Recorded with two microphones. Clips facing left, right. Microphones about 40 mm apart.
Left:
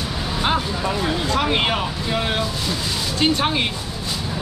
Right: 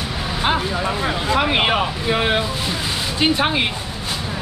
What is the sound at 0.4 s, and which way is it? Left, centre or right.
Vehicle, centre.